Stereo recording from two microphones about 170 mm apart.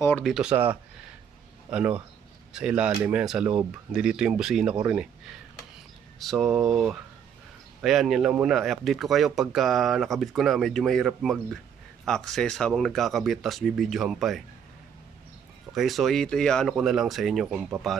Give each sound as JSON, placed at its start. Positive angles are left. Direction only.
{"t": 0.2, "sound": "speech", "side_deg": 0}
{"t": 1.7, "sound": "speech", "side_deg": -5}
{"t": 6.1, "sound": "speech", "side_deg": 0}
{"t": 7.8, "sound": "speech", "side_deg": 0}
{"t": 15.7, "sound": "speech", "side_deg": 0}